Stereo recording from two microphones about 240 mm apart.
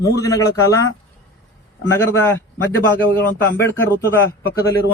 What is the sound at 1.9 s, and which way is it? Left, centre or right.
A man's voice, centre.